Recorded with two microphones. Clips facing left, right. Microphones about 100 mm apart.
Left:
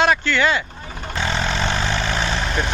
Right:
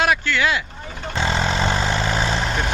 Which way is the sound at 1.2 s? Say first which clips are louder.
Right 2 dB; 35° right (ahead or behind).